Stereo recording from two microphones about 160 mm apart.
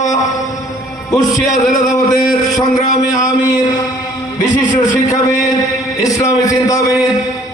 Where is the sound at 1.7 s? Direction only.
20° left (ahead or behind).